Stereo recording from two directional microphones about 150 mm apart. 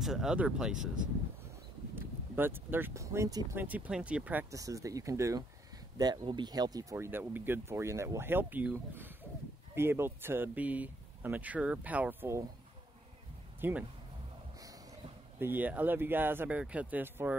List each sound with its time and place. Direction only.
0.0 s speech: 5° right (ahead or behind)
2.0 s speech: 15° right (ahead or behind)
3.5 s speech: 10° right (ahead or behind)
13.6 s speech: 15° right (ahead or behind)
15.3 s speech: 15° right (ahead or behind)